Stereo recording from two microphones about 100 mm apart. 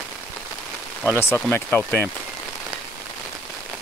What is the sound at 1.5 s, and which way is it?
Speech, 20° left (ahead or behind).